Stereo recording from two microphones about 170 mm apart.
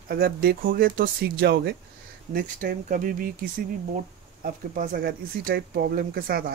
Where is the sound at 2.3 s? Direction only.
55° right (ahead or behind).